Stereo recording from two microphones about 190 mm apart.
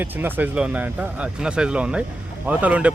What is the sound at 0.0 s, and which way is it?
Speech, 10° right (ahead or behind).